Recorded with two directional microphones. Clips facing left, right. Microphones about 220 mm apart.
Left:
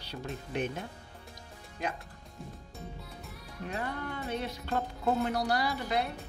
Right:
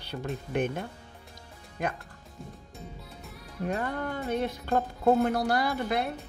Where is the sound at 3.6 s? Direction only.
50° right (ahead or behind).